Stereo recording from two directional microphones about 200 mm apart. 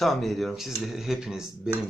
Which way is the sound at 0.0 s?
Centre (ahead or behind).